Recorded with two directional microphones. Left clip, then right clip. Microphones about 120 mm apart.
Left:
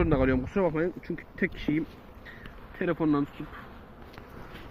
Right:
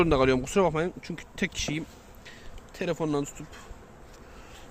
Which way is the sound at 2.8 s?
60° right (ahead or behind).